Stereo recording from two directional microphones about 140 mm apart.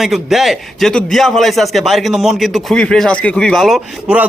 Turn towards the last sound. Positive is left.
turn(degrees=0)  # may be behind; listen again after turning